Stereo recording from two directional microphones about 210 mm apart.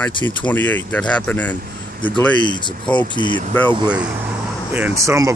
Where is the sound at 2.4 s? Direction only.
20° left (ahead or behind).